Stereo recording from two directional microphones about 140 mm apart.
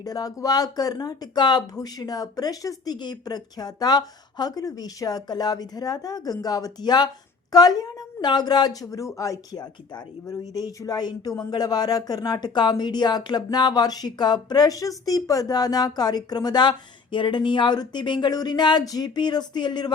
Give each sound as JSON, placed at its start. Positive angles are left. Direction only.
{"t": 0.0, "sound": "a woman's voice", "side_deg": 25}